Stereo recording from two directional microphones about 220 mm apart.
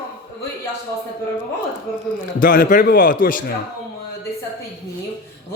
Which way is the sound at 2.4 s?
40° left (ahead or behind).